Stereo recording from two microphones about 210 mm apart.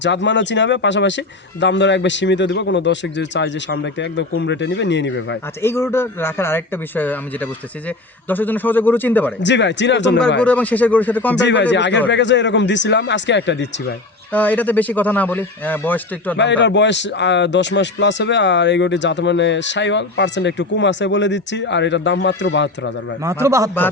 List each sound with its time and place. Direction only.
0.0 s a man's voice: 60° left (ahead or behind)
5.6 s a man's voice: 10° left (ahead or behind)
9.4 s a man's voice: 55° left (ahead or behind)
10.4 s a man's voice: 5° left (ahead or behind)
11.3 s a man's voice: 60° left (ahead or behind)
14.3 s a man's voice: 5° left (ahead or behind)
16.4 s a man's voice: 55° left (ahead or behind)
23.2 s a man's voice: 15° right (ahead or behind)